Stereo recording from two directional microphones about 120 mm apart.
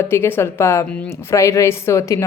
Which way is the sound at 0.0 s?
20° left (ahead or behind).